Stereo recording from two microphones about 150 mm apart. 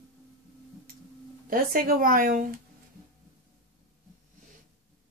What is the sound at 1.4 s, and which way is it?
Speech, 75° right (ahead or behind).